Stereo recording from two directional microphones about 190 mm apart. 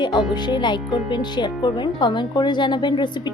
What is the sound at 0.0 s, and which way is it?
Speech, 25° left (ahead or behind).